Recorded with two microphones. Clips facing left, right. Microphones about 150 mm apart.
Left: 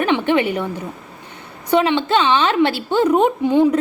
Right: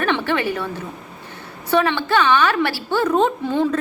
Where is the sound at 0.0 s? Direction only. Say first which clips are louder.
Left 4 dB; 15° left (ahead or behind).